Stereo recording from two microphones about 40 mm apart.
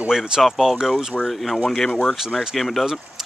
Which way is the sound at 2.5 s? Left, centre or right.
Centre.